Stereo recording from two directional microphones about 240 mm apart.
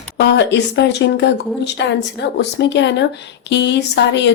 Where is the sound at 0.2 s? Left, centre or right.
Left.